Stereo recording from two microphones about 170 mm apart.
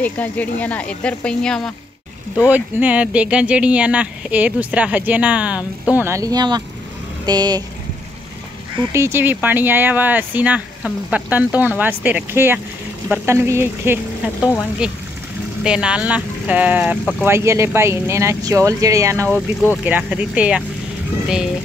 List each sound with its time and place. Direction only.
0.0 s speech: 10° left (ahead or behind)
2.3 s speech: 10° right (ahead or behind)
8.9 s speech: 15° right (ahead or behind)